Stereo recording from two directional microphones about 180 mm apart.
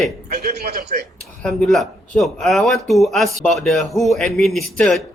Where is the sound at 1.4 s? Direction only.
Centre (ahead or behind).